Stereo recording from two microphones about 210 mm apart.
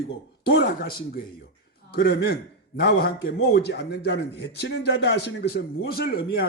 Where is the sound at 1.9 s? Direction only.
55° left (ahead or behind).